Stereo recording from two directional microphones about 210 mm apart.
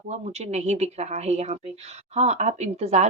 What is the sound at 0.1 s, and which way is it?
Speech, 30° right (ahead or behind).